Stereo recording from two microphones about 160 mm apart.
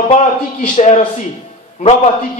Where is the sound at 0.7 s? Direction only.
45° left (ahead or behind).